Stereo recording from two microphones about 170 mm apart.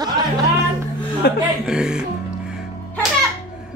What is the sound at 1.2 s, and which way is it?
Speech, 65° left (ahead or behind).